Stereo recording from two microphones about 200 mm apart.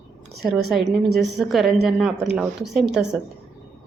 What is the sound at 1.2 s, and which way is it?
A woman's voice, centre (ahead or behind).